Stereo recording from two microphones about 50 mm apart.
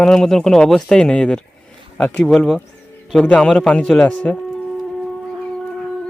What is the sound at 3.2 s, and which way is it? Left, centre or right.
Speech, left.